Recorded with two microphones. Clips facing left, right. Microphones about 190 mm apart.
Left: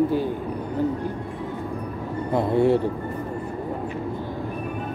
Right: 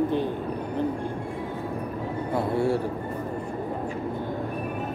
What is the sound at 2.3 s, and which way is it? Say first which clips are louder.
Speech: left 5 dB; 20° left (ahead or behind).